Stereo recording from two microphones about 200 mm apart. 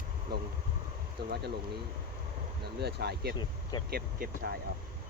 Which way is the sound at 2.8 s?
55° right (ahead or behind).